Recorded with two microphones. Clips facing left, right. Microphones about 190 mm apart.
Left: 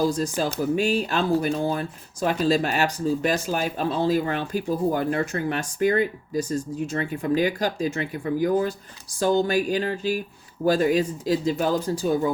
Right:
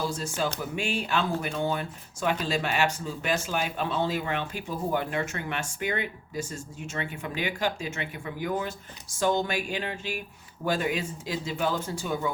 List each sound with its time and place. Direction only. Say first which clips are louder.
0.0 s speech: left 6 dB; 40° left (ahead or behind)